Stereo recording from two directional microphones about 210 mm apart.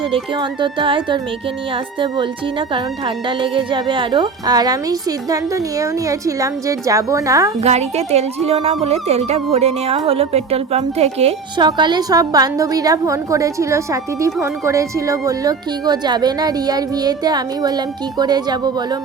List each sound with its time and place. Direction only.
0.0 s a woman's voice: 25° right (ahead or behind)
7.6 s speech: 30° right (ahead or behind)